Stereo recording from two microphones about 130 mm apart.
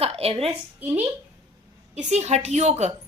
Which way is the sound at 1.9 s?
60° right (ahead or behind).